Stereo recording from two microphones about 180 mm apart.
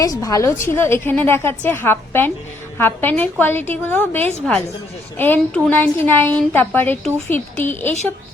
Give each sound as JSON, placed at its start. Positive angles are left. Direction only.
{"t": 0.0, "sound": "a woman's voice", "side_deg": 20}